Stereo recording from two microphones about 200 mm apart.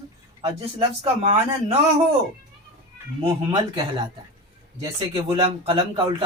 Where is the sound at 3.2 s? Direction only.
25° right (ahead or behind).